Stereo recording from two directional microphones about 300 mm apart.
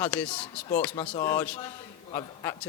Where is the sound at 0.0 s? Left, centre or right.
Centre.